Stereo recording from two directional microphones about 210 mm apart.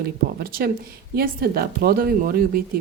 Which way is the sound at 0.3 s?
45° right (ahead or behind).